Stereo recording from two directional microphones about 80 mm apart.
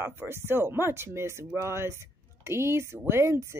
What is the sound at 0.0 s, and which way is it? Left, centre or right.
A woman's voice, right.